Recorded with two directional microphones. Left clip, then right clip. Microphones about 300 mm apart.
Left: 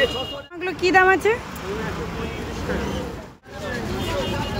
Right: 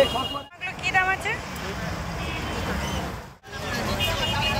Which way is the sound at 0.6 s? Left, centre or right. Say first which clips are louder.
Left 7 dB; left.